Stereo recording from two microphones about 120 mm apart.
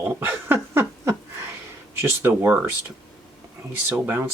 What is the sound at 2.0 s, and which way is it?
Speech, 20° right (ahead or behind).